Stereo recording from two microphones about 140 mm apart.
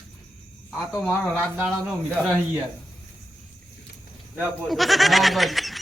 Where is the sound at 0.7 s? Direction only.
Centre (ahead or behind).